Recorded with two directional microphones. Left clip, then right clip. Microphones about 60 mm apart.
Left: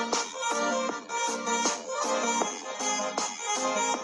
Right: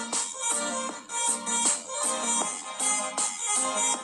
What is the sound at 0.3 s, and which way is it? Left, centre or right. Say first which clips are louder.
Music: left 3 dB; left.